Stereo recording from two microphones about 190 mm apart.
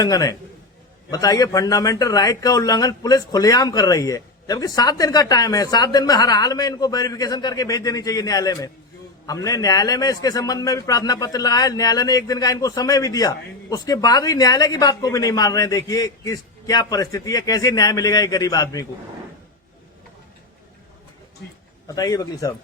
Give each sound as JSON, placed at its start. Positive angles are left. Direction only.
{"t": 0.0, "sound": "a man's voice", "side_deg": 20}
{"t": 21.8, "sound": "a man's voice", "side_deg": 20}